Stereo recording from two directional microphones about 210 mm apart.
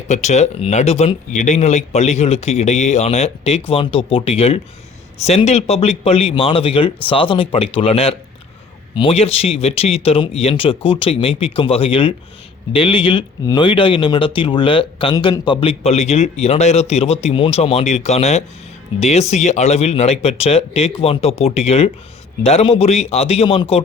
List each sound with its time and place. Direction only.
0.1 s speech: 35° left (ahead or behind)